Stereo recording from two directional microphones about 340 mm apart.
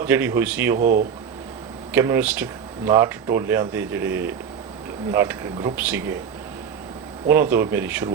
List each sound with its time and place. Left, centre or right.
0.0 s a man's voice: centre
0.8 s speech: right
1.9 s speech: centre
7.3 s speech: centre